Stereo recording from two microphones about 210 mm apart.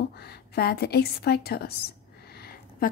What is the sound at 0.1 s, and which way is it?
A woman's voice, 50° left (ahead or behind).